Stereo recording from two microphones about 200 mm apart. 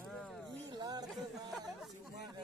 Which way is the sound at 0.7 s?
20° right (ahead or behind).